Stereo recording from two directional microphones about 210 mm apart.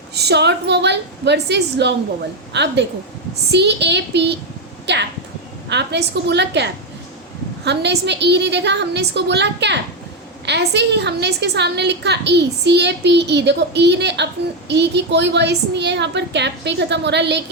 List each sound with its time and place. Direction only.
0.1 s a woman's voice: 50° right (ahead or behind)